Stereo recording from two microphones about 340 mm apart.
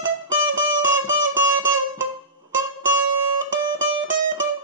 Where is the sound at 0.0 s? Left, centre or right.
Right.